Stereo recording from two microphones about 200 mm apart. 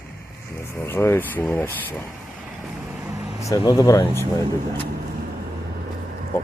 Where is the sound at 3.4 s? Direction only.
20° left (ahead or behind).